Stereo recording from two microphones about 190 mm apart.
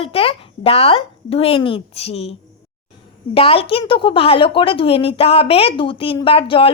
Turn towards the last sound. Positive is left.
turn(degrees=30)  # may be behind; listen again after turning